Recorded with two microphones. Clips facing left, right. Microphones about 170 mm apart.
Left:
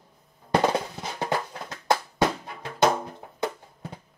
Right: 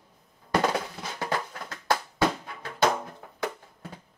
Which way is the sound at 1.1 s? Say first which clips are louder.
Left 3 dB; 20° left (ahead or behind).